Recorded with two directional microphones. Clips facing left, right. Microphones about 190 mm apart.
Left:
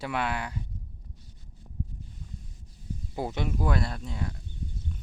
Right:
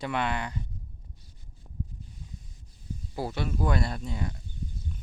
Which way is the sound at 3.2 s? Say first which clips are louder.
Left 1 dB; 20° left (ahead or behind).